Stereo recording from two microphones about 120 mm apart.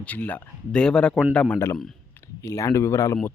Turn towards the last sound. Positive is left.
turn(degrees=25)  # may be behind; listen again after turning